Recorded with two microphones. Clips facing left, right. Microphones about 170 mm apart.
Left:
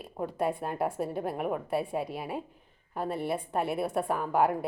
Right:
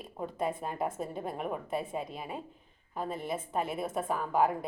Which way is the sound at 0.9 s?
70° left (ahead or behind).